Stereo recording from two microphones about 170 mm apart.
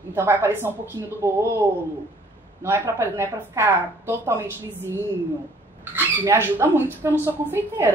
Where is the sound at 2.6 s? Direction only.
15° right (ahead or behind).